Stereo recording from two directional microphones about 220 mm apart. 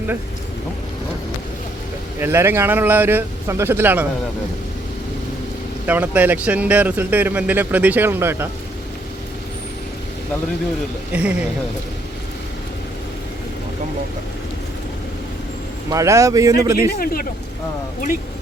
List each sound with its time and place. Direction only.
2.1 s speech: 10° right (ahead or behind)
5.8 s speech: 10° right (ahead or behind)
11.1 s speech: 5° right (ahead or behind)
15.9 s speech: 15° right (ahead or behind)
17.0 s speech: 40° left (ahead or behind)